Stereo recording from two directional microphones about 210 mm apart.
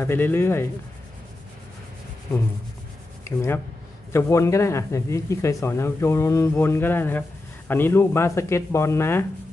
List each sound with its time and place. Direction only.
0.0 s speech: 10° left (ahead or behind)
3.3 s speech: 10° left (ahead or behind)